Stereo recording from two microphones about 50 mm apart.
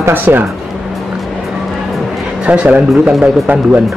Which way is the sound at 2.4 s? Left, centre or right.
Right.